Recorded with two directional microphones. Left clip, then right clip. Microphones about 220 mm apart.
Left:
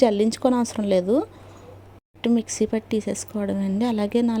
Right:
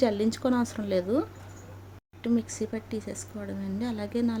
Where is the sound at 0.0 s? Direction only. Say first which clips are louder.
Left 7 dB; 30° left (ahead or behind).